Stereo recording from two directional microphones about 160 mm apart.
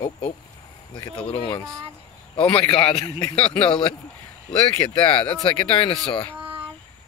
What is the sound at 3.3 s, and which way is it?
Speech, 35° left (ahead or behind).